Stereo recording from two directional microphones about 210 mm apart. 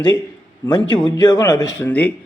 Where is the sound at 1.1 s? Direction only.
20° left (ahead or behind).